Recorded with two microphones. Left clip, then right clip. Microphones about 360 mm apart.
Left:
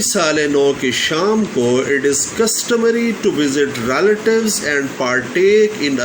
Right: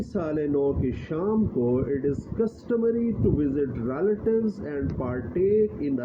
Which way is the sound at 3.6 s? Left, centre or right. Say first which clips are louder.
Left 12 dB; right.